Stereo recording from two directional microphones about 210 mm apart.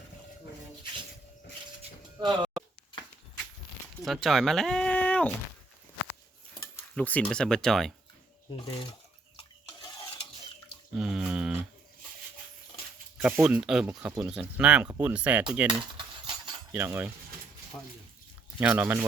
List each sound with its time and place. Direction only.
2.2 s a sound: 20° right (ahead or behind)
4.0 s speech: centre (ahead or behind)
6.5 s speech: 5° left (ahead or behind)
8.4 s speech: 25° left (ahead or behind)
9.6 s stir: 20° left (ahead or behind)
10.9 s a sound: 5° right (ahead or behind)
13.2 s speech: 5° right (ahead or behind)
16.0 s cutlery: 20° right (ahead or behind)
16.7 s speech: 10° right (ahead or behind)
18.6 s speech: 10° right (ahead or behind)